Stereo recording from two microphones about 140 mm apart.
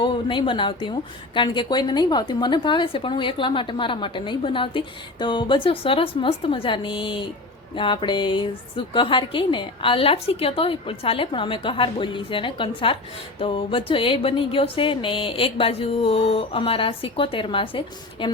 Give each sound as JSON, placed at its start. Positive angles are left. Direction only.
{"t": 0.0, "sound": "a woman's voice", "side_deg": 35}